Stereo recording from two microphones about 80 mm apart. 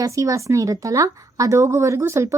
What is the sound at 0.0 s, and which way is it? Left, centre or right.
A woman's voice, right.